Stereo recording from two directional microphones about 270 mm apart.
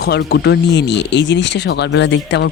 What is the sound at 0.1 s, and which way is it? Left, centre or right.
Speech, left.